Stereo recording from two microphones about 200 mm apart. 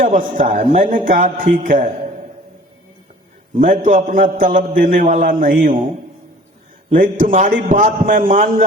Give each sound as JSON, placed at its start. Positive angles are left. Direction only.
{"t": 0.0, "sound": "a man's voice", "side_deg": -40}
{"t": 3.6, "sound": "a man's voice", "side_deg": -40}
{"t": 6.9, "sound": "a man's voice", "side_deg": -40}